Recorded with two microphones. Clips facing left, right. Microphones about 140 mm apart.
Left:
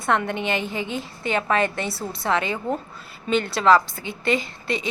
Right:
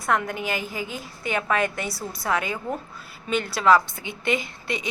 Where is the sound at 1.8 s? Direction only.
25° left (ahead or behind).